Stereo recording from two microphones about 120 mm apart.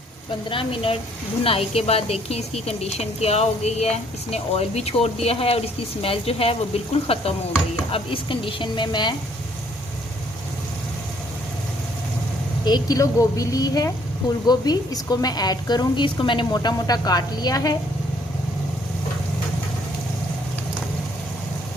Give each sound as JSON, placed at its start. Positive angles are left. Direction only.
{"t": 0.5, "sound": "a woman's voice", "side_deg": 50}
{"t": 12.6, "sound": "a woman's voice", "side_deg": 35}